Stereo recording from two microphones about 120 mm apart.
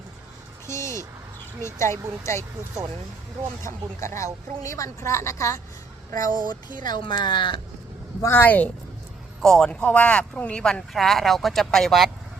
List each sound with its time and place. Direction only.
0.7 s vehicle: 25° left (ahead or behind)
1.6 s a woman's voice: 25° left (ahead or behind)
4.0 s a woman's voice: 25° left (ahead or behind)
6.7 s speech: 40° left (ahead or behind)
8.2 s speech: 20° left (ahead or behind); by 12.1 s centre (ahead or behind)